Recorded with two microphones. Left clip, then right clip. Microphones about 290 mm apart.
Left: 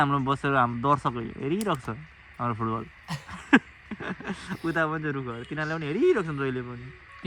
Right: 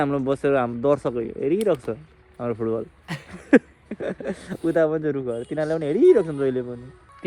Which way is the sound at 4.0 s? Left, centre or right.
Centre.